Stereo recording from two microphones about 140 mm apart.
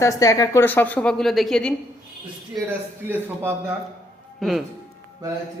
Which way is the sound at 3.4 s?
15° right (ahead or behind).